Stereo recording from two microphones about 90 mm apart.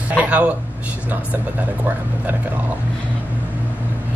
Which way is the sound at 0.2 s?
15° right (ahead or behind).